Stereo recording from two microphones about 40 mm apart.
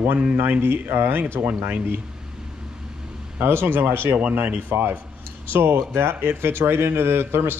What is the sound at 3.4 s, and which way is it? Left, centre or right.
Speech, right.